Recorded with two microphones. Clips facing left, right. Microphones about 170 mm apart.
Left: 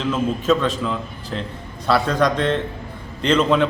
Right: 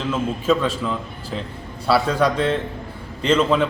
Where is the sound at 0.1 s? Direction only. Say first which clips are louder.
Left 1 dB; 5° right (ahead or behind).